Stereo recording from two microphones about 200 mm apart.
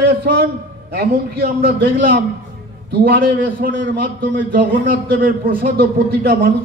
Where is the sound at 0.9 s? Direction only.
50° right (ahead or behind).